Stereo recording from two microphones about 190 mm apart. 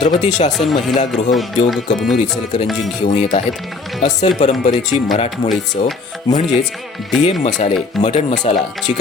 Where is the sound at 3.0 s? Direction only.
35° left (ahead or behind).